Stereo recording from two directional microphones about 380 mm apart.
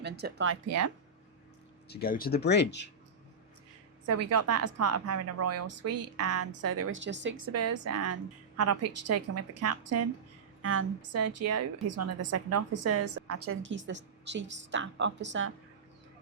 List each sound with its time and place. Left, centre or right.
0.0 s a woman's voice: right
1.9 s speech: left
4.0 s a woman's voice: right